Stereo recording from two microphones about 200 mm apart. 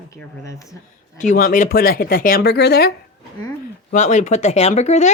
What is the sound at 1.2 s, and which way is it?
Speech, 40° left (ahead or behind).